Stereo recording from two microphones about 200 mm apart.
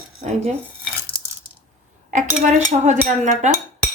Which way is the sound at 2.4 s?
40° right (ahead or behind).